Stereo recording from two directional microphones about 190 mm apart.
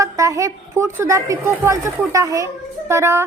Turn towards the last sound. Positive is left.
turn(degrees=-15)  # may be behind; listen again after turning